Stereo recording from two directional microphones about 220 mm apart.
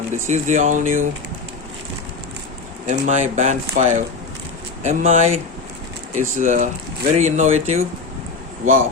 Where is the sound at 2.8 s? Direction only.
30° right (ahead or behind).